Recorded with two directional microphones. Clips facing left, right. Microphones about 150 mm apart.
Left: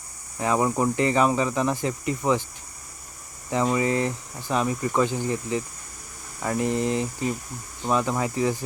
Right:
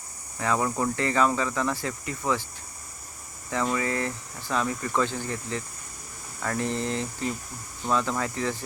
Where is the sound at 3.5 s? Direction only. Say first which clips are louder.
Left 4 dB; 20° left (ahead or behind).